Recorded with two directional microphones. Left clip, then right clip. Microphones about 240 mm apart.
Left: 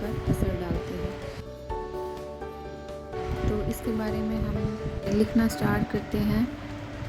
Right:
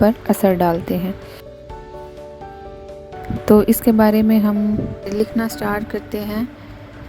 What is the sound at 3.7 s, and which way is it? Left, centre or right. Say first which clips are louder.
A woman's voice: right 16 dB; right.